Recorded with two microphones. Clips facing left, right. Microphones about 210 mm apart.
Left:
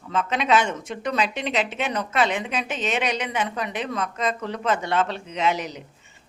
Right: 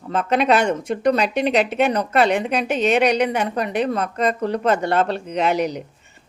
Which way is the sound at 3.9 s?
60° right (ahead or behind).